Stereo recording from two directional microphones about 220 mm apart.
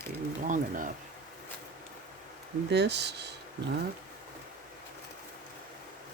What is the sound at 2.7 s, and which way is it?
Speech, 50° right (ahead or behind).